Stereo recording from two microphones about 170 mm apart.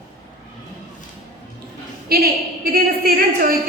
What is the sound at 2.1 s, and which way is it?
A woman's voice, 65° right (ahead or behind).